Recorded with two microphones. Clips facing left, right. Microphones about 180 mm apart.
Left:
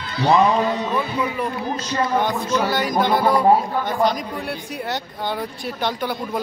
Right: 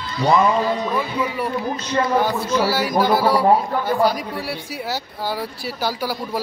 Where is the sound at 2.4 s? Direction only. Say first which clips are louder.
Right 1 dB; 5° right (ahead or behind).